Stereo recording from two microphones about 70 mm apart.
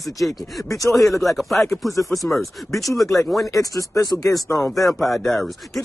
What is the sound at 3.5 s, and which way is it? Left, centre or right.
Speech, left.